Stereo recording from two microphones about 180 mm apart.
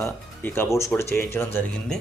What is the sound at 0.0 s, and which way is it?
Speech, 15° left (ahead or behind).